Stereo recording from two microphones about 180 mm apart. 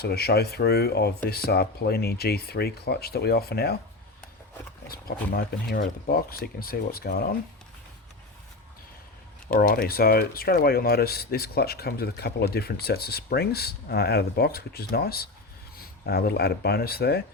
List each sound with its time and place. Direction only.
0.0 s speech: 60° left (ahead or behind)
4.9 s speech: 55° left (ahead or behind)
9.5 s speech: 55° left (ahead or behind)